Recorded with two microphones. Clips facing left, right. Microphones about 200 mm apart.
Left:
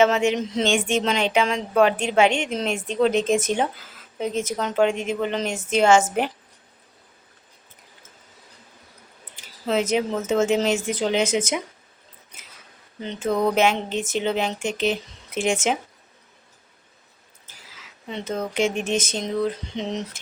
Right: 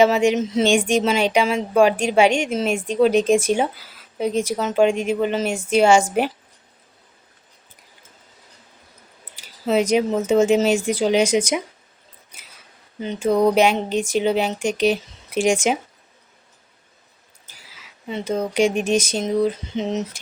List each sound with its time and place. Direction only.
0.0 s a woman's voice: 15° right (ahead or behind)
9.6 s a woman's voice: 10° right (ahead or behind)
13.0 s a woman's voice: 10° right (ahead or behind)
18.1 s a woman's voice: 10° right (ahead or behind)